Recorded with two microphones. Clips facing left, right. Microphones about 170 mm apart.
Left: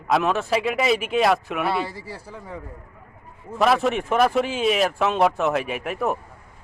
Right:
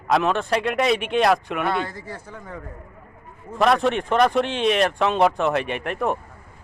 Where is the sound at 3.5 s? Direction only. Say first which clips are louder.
Right 1 dB; centre (ahead or behind).